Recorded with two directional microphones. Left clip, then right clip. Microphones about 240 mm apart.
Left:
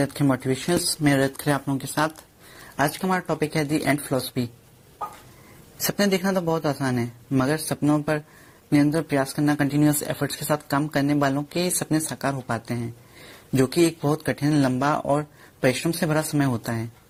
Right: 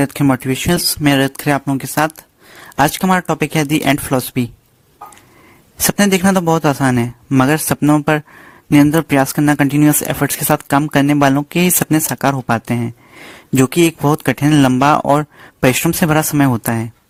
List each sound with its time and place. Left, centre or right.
0.0 s speech: right
5.9 s speech: right